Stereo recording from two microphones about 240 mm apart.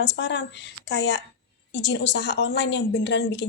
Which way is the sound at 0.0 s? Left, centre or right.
Left.